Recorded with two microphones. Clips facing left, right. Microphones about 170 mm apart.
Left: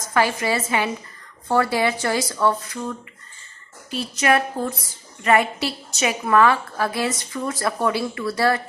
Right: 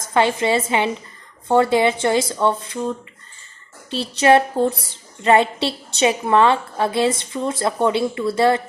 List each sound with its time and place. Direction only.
0.1 s a woman's voice: 25° right (ahead or behind)